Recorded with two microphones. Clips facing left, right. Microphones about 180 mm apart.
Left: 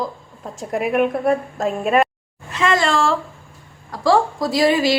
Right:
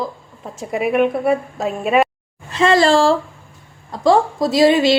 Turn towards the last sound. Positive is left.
turn(degrees=-25)  # may be behind; listen again after turning